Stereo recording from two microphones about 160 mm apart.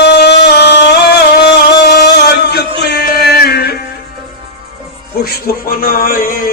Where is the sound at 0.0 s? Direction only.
90° left.